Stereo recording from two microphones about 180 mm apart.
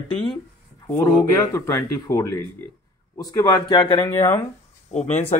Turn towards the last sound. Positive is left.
turn(degrees=40)  # may be behind; listen again after turning